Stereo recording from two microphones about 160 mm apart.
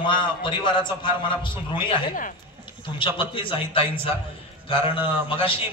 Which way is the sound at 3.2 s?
35° left (ahead or behind).